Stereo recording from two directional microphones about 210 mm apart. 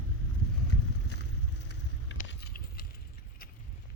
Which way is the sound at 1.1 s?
55° left (ahead or behind).